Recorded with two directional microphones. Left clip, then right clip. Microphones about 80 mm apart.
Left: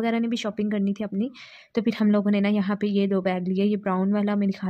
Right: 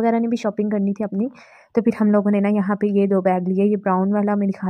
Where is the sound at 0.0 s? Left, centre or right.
Right.